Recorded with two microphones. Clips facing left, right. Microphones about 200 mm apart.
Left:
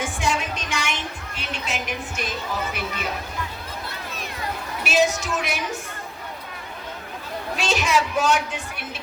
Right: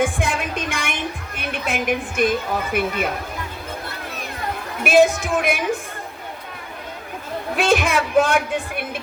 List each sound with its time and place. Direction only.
0.0 s music: 55° right (ahead or behind)
4.8 s a woman's voice: 55° right (ahead or behind)
7.5 s a man's voice: 55° right (ahead or behind)